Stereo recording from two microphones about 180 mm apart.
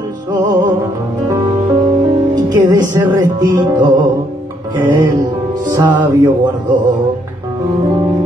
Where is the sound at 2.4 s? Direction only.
25° right (ahead or behind).